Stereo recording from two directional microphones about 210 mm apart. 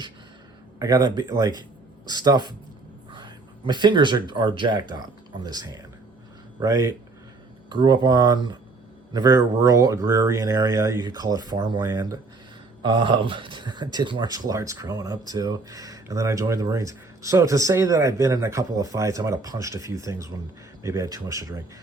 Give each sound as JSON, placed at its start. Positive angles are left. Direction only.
{"t": 0.8, "sound": "speech", "side_deg": -15}